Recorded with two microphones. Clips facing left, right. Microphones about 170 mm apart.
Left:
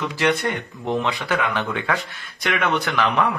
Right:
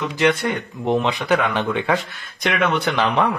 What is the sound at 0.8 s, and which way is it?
Speech, 20° right (ahead or behind).